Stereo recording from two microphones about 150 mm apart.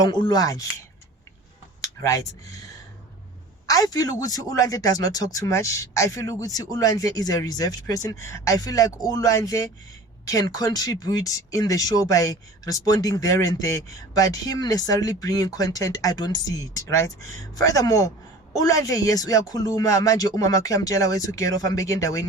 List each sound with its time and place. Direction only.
0.0 s speech: 30° left (ahead or behind)
1.8 s speech: 20° left (ahead or behind)
3.7 s speech: 25° left (ahead or behind)